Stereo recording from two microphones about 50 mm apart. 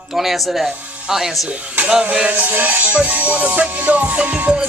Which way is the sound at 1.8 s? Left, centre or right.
Centre.